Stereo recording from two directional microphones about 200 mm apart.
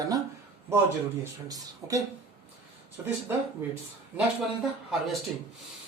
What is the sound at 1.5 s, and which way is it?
Speech, 15° right (ahead or behind).